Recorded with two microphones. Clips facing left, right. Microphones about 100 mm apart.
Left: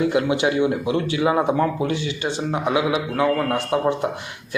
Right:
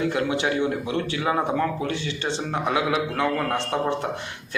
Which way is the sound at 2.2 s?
5° left (ahead or behind).